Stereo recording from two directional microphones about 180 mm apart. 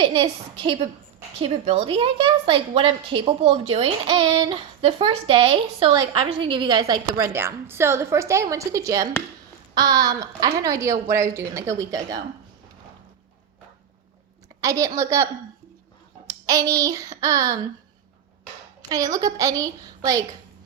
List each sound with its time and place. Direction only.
0.0 s a woman's voice: 30° right (ahead or behind)
14.6 s a woman's voice: 20° right (ahead or behind)
18.8 s a woman's voice: 20° right (ahead or behind)